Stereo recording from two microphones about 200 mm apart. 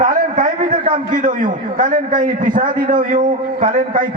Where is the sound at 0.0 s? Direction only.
40° right (ahead or behind).